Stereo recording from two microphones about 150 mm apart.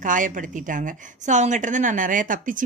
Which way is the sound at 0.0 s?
60° right (ahead or behind).